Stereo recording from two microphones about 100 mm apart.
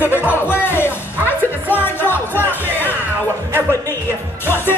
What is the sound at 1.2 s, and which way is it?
Music, 15° right (ahead or behind).